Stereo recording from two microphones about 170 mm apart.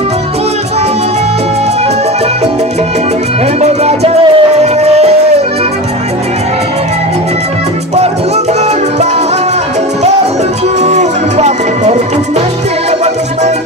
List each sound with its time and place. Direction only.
3.6 s music: 40° right (ahead or behind)
10.8 s music: 40° right (ahead or behind)